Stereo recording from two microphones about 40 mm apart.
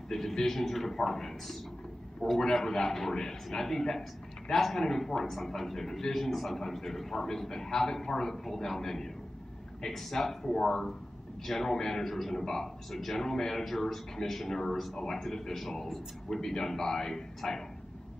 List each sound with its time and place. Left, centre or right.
0.1 s a man's voice: centre